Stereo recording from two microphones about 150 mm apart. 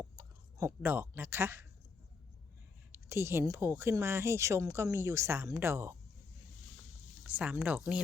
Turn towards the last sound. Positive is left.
turn(degrees=-10)  # may be behind; listen again after turning